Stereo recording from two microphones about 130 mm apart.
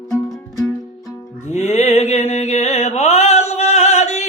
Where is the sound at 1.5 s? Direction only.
60° left (ahead or behind).